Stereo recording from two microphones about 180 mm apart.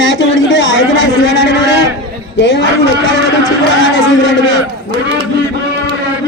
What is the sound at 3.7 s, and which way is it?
Speech, 90° left.